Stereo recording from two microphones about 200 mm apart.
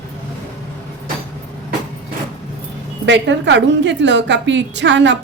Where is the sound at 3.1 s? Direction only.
65° right (ahead or behind).